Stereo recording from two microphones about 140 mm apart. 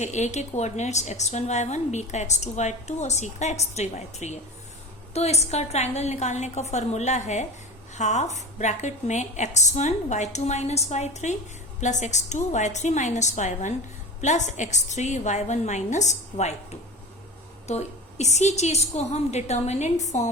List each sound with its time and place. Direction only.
0.0 s a woman's voice: 55° left (ahead or behind)
17.7 s a woman's voice: 50° left (ahead or behind)